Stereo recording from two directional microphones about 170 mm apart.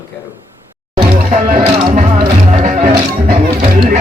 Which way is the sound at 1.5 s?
50° right (ahead or behind).